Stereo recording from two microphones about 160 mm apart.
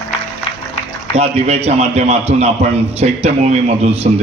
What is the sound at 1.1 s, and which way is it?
A man's voice, 40° right (ahead or behind).